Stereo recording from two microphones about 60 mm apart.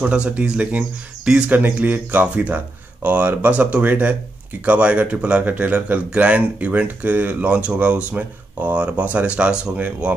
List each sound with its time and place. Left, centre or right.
0.0 s speech: centre